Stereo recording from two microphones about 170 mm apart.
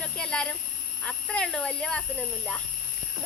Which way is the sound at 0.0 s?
5° left (ahead or behind).